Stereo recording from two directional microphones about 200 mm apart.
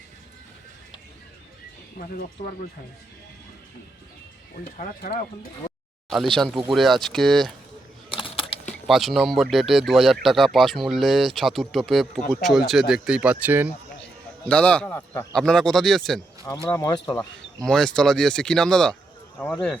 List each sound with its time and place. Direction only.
4.6 s speech: 45° left (ahead or behind)
6.1 s speech: centre (ahead or behind)
8.1 s a sound: 25° left (ahead or behind)
8.9 s speech: centre (ahead or behind)
14.4 s a man's voice: 5° left (ahead or behind)
16.7 s speech: 20° left (ahead or behind)
17.7 s speech: 5° left (ahead or behind)